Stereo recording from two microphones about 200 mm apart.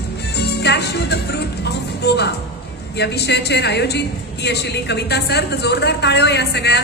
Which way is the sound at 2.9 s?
55° left (ahead or behind).